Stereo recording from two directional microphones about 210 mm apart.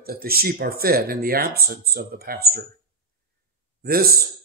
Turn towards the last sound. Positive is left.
turn(degrees=-45)  # may be behind; listen again after turning